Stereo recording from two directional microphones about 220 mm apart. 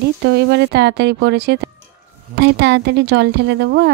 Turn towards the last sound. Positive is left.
turn(degrees=-50)  # may be behind; listen again after turning